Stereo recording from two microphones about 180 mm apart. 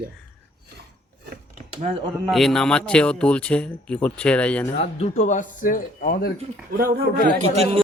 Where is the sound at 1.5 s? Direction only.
40° right (ahead or behind).